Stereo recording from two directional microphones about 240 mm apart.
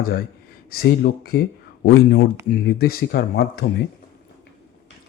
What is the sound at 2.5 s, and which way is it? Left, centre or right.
Speech, left.